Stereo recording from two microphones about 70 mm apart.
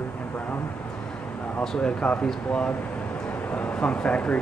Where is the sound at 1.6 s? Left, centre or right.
Centre.